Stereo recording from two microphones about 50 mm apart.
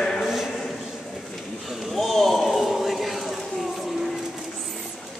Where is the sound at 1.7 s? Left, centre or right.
Centre.